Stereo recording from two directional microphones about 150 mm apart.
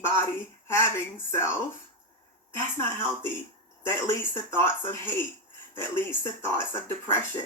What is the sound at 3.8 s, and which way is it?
Speech, 15° left (ahead or behind).